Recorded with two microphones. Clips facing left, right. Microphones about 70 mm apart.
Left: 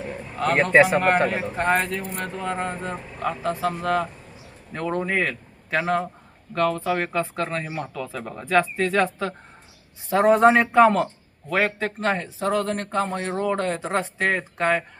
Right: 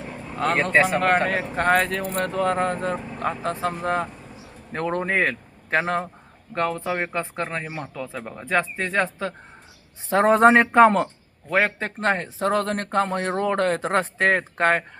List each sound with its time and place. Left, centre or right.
0.5 s speech: left
1.3 s speech: right
3.2 s speech: right
4.7 s a man's voice: right
6.5 s speech: right
10.1 s a man's voice: right